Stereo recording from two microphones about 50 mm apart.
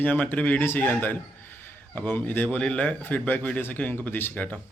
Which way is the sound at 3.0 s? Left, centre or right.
Left.